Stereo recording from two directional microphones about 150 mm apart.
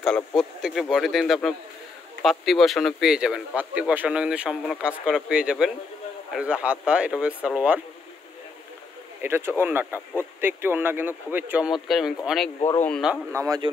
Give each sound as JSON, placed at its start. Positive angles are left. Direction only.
{"t": 0.4, "sound": "speech", "side_deg": 0}
{"t": 9.2, "sound": "speech", "side_deg": -15}
{"t": 12.7, "sound": "speech", "side_deg": 10}
{"t": 13.3, "sound": "speech", "side_deg": -20}